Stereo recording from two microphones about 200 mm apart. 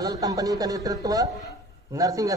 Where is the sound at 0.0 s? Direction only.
15° right (ahead or behind).